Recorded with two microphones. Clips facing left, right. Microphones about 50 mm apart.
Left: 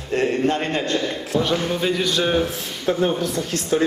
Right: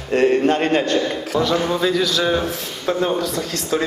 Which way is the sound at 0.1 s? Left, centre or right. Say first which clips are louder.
Right 4 dB; right.